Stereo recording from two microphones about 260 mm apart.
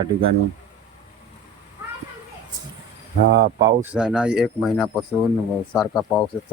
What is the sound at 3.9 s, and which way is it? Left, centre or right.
Speech, centre.